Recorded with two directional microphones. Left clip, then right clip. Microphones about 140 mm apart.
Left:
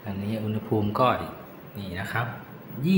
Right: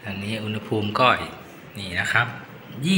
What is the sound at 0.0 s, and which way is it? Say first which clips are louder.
A man's voice: right 3 dB; 15° left (ahead or behind).